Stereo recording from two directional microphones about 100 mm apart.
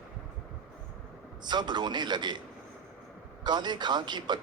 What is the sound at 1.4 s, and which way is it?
Speech, 45° right (ahead or behind).